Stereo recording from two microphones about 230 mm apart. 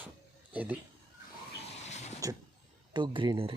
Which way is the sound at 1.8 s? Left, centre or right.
Left.